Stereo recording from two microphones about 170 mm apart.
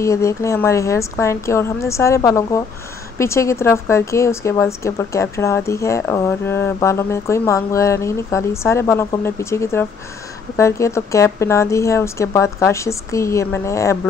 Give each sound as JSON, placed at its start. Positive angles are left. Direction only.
{"t": 0.0, "sound": "a woman's voice", "side_deg": 15}